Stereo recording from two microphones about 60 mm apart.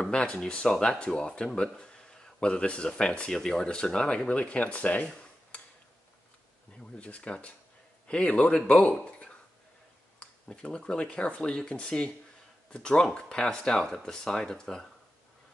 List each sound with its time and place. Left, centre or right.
0.0 s speech: centre
6.8 s speech: left
10.1 s speech: centre